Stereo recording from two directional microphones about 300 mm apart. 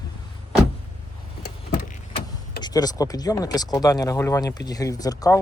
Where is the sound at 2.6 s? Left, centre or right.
Centre.